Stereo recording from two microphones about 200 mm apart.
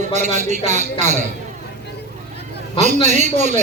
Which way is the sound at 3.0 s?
35° right (ahead or behind).